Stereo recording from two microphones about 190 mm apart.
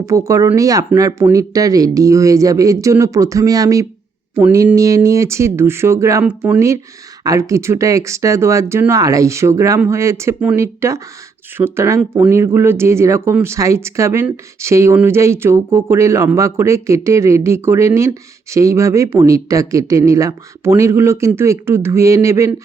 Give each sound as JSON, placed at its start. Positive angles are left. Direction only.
{"t": 0.0, "sound": "speech", "side_deg": -15}